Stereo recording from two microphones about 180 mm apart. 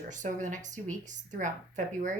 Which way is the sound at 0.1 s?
45° right (ahead or behind).